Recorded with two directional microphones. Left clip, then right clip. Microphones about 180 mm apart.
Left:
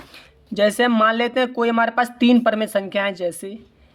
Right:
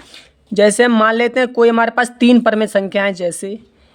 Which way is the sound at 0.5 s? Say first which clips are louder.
Right 6 dB; 25° right (ahead or behind).